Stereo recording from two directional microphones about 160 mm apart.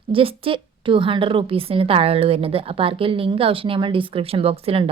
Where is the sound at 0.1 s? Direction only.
35° right (ahead or behind).